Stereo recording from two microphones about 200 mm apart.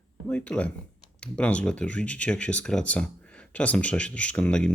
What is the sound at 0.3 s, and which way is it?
Speech, 5° left (ahead or behind).